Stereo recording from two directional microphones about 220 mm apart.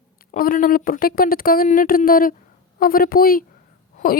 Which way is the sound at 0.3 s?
40° left (ahead or behind).